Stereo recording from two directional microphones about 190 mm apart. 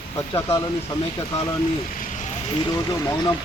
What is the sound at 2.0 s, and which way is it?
Vehicle, 40° left (ahead or behind).